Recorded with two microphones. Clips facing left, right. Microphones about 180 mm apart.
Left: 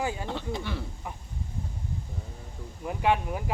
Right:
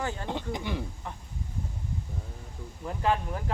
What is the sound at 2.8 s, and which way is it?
Speech, 10° left (ahead or behind).